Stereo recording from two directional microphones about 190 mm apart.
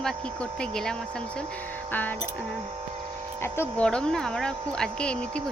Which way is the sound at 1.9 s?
10° left (ahead or behind).